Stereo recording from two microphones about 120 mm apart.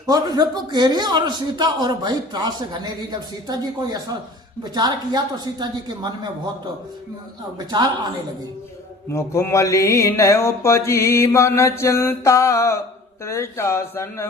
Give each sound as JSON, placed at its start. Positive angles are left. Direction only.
{"t": 0.1, "sound": "a man's voice", "side_deg": -35}
{"t": 9.1, "sound": "mantra", "side_deg": 20}